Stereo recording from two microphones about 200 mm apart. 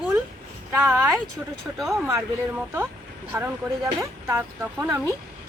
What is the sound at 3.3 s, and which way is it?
A woman's voice, 10° right (ahead or behind).